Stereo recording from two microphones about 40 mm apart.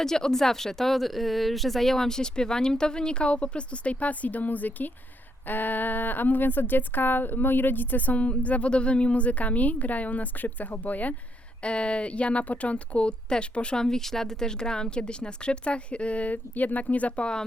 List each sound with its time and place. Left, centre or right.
0.0 s speech: centre; by 11.1 s left
11.6 s speech: left
13.8 s speech: centre; by 17.2 s left